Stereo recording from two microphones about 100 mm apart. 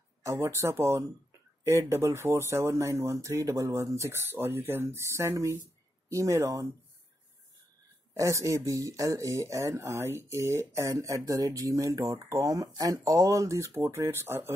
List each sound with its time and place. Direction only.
0.2 s speech: 30° right (ahead or behind)
8.1 s speech: 30° right (ahead or behind)